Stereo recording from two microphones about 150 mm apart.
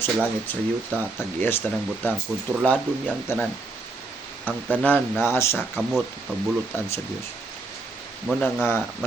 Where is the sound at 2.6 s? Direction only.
10° left (ahead or behind).